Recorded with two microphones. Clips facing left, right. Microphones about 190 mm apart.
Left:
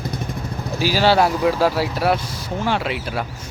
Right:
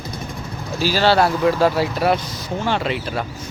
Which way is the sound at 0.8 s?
10° left (ahead or behind).